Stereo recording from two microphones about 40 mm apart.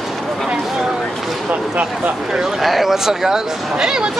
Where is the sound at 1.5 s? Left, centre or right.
Right.